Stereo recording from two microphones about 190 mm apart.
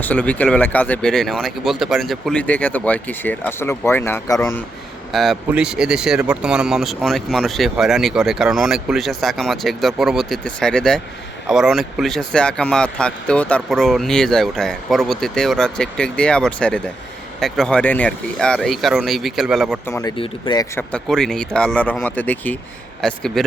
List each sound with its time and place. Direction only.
0.0 s speech: 10° left (ahead or behind)
5.1 s speech: centre (ahead or behind)
19.8 s speech: 15° left (ahead or behind)
20.1 s speech: 25° left (ahead or behind)
20.7 s speech: 5° left (ahead or behind)